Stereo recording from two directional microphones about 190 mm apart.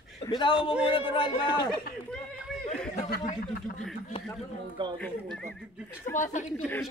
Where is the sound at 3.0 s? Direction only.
45° left (ahead or behind).